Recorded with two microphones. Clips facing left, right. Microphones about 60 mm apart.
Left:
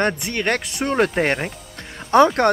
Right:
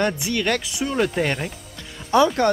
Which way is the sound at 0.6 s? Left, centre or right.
Left.